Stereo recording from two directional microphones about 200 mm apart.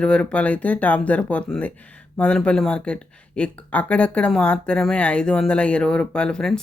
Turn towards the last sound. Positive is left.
turn(degrees=5)  # may be behind; listen again after turning